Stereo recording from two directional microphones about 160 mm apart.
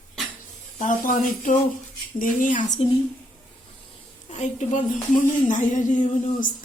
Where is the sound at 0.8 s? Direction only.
55° left (ahead or behind).